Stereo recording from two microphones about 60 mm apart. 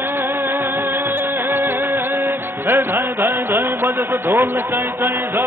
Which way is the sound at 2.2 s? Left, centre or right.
Right.